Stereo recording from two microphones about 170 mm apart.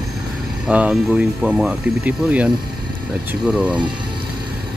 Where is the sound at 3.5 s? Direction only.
5° right (ahead or behind).